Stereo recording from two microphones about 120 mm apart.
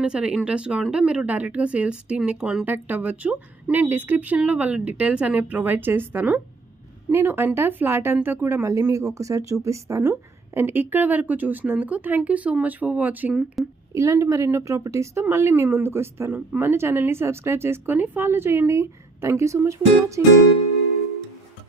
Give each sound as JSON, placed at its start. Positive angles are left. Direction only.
{"t": 0.0, "sound": "a woman's voice", "side_deg": -5}
{"t": 13.3, "sound": "speech", "side_deg": -5}
{"t": 13.9, "sound": "a woman's voice", "side_deg": -25}